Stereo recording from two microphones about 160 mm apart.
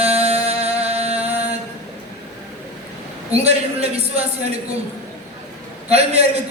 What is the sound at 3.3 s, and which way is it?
Speech, 40° right (ahead or behind).